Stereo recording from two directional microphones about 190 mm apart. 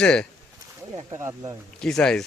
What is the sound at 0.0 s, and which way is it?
Speech, 5° left (ahead or behind).